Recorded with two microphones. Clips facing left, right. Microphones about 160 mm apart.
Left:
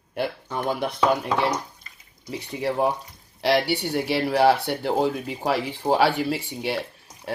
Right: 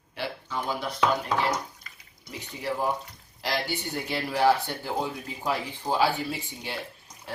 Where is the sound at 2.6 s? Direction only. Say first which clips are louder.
Left 5 dB; 65° left (ahead or behind).